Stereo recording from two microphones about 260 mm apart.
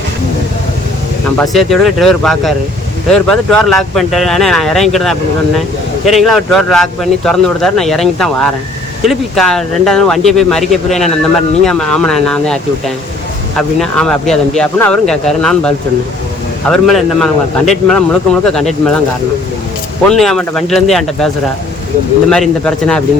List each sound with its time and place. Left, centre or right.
1.4 s speech: centre
13.6 s speech: centre
20.1 s speech: centre
22.3 s speech: centre